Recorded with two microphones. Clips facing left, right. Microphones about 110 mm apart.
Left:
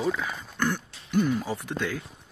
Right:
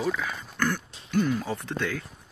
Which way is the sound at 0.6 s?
15° left (ahead or behind).